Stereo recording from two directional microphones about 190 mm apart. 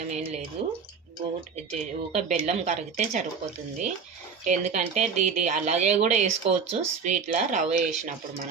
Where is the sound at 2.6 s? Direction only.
40° right (ahead or behind).